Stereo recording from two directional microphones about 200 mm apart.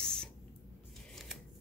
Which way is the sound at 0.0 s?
5° left (ahead or behind).